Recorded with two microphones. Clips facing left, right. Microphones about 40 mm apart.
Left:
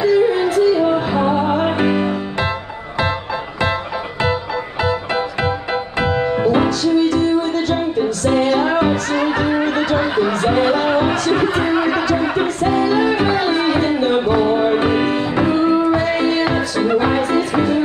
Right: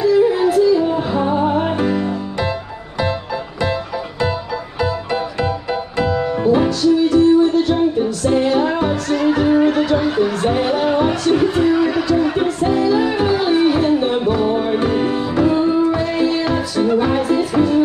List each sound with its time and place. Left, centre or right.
0.0 s music: centre
0.5 s music: centre
0.7 s music: left
1.8 s music: left
4.8 s music: left
6.8 s music: centre
7.7 s music: centre
12.6 s music: centre
13.2 s music: left
15.7 s music: centre